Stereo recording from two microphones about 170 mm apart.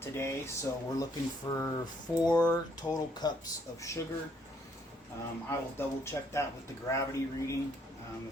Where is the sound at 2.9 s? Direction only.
25° left (ahead or behind).